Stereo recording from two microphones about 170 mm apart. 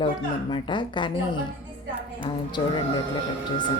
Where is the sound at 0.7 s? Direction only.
25° left (ahead or behind).